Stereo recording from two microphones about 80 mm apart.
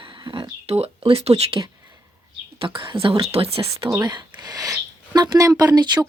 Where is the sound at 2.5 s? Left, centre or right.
Right.